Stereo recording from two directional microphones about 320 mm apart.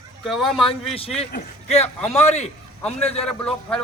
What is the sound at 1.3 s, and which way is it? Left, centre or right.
A man's voice, centre.